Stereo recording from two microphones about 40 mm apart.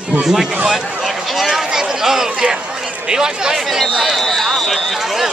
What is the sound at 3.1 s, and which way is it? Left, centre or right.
Speech, centre.